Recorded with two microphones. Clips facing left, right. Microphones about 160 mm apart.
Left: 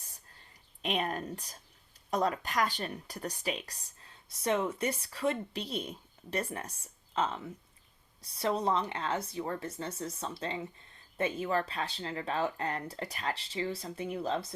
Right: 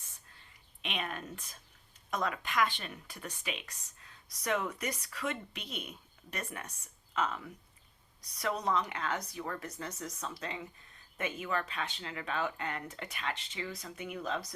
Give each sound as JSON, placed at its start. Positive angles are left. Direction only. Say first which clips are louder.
{"t": 0.8, "sound": "a woman's voice", "louder": "left 6 dB", "side_deg": 40}